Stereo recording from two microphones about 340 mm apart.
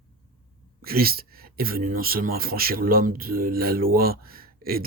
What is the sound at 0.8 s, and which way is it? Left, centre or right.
Speech, right.